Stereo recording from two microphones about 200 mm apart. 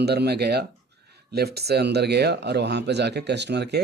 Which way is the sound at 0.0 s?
55° right (ahead or behind).